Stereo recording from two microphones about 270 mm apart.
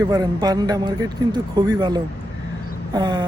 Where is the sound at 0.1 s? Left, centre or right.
Centre.